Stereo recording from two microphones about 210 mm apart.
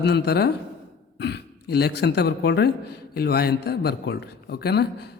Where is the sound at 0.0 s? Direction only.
50° left (ahead or behind).